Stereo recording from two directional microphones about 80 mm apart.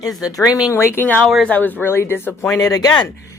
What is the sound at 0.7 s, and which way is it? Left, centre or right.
Speech, left.